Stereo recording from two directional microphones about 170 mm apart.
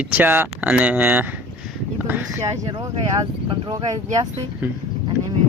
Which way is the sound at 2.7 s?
30° right (ahead or behind).